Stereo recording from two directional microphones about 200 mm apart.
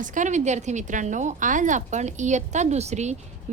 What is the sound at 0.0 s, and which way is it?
A woman's voice, 40° right (ahead or behind).